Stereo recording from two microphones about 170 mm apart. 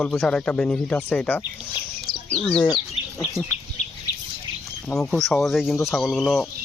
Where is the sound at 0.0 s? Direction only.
5° left (ahead or behind).